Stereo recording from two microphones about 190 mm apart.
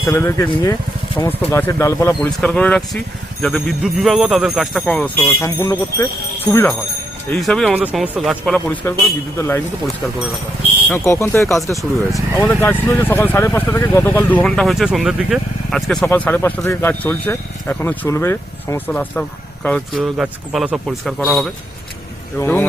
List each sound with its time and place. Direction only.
0.1 s speech: 10° left (ahead or behind)
10.9 s speech: 15° left (ahead or behind); by 21.5 s centre (ahead or behind)
22.4 s speech: 10° left (ahead or behind)